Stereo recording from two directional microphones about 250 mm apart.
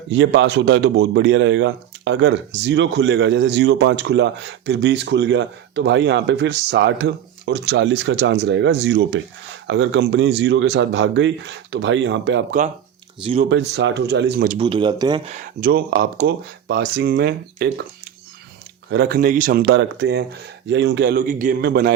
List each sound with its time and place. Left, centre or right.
0.1 s speech: right
13.5 s speech: right
14.6 s speech: centre
15.3 s speech: right
18.9 s speech: right